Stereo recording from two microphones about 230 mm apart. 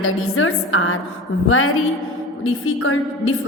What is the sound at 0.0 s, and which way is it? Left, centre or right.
A woman's voice, left.